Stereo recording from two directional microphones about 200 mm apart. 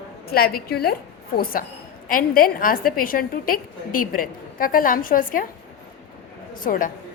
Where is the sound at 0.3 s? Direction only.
50° left (ahead or behind).